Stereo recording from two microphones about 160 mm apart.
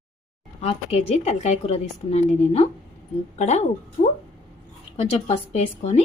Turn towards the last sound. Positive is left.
turn(degrees=45)  # may be behind; listen again after turning